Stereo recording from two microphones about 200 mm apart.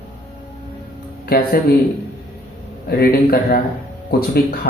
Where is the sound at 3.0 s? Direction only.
50° left (ahead or behind).